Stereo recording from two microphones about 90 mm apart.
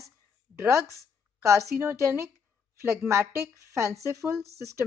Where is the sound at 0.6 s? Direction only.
35° right (ahead or behind).